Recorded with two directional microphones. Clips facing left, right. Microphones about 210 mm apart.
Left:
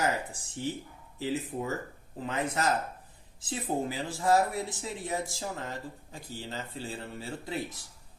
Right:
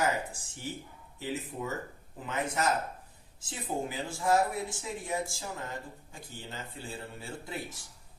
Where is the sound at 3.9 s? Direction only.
35° left (ahead or behind).